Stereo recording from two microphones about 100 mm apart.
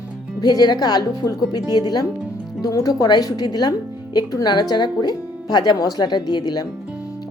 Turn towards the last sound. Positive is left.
turn(degrees=45)  # may be behind; listen again after turning